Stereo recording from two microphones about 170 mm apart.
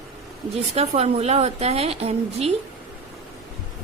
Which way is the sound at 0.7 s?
40° right (ahead or behind).